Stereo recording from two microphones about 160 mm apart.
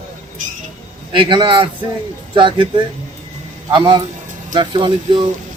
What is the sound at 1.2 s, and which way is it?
Speech, 30° right (ahead or behind).